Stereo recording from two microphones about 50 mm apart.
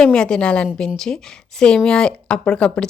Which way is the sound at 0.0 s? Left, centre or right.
Centre.